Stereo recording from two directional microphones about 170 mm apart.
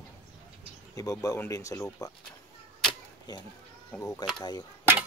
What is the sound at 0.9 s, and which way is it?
Speech, 20° left (ahead or behind).